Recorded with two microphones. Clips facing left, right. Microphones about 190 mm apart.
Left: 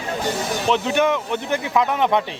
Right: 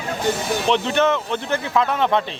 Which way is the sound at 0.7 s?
10° left (ahead or behind).